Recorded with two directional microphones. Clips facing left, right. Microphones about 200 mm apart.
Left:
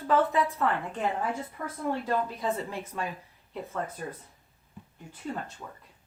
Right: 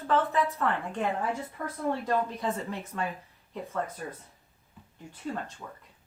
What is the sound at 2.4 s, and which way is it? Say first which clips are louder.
Speech: left 1 dB; 10° left (ahead or behind).